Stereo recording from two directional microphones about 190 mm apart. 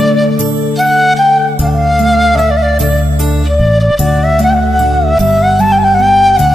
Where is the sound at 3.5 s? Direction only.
Centre (ahead or behind).